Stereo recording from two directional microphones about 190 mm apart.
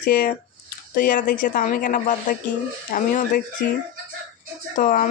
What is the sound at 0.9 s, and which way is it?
Speech, 45° left (ahead or behind).